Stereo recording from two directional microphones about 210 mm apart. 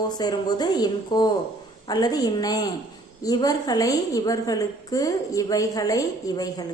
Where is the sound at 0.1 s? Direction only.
20° left (ahead or behind).